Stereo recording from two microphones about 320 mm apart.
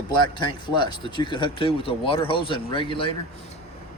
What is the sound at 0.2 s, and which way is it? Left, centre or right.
A man's voice, centre.